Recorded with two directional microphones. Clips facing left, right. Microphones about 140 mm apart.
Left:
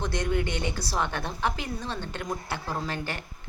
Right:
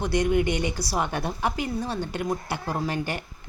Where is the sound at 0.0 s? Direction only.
10° right (ahead or behind).